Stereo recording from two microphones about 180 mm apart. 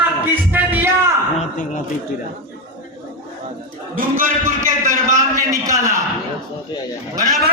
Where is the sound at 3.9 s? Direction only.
50° right (ahead or behind).